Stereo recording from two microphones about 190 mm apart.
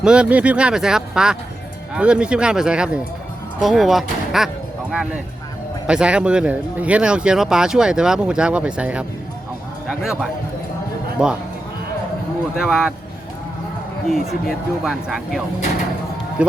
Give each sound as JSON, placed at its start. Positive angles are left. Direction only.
{"t": 0.0, "sound": "speech", "side_deg": -5}
{"t": 12.5, "sound": "speech", "side_deg": 0}
{"t": 14.1, "sound": "speech", "side_deg": 0}
{"t": 16.4, "sound": "speech", "side_deg": -5}